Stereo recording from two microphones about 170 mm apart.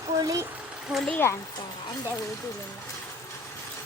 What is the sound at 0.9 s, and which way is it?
Speech, 5° left (ahead or behind).